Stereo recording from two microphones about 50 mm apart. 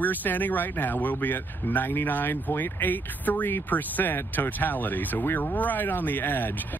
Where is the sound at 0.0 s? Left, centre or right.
Left.